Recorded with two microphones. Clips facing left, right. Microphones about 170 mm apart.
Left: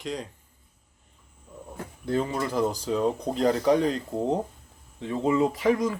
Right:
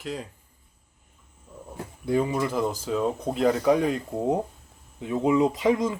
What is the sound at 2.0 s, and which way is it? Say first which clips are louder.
Speech: right 3 dB; 10° right (ahead or behind).